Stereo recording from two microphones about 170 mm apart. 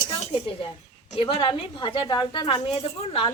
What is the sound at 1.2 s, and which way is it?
Speech, 30° left (ahead or behind).